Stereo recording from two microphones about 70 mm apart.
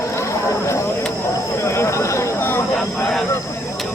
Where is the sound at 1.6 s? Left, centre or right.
Left.